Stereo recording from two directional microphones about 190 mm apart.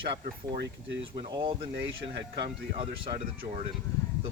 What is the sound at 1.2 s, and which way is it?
Speech, 25° right (ahead or behind).